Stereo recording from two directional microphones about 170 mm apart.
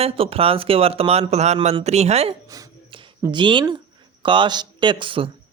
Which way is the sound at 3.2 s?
25° right (ahead or behind).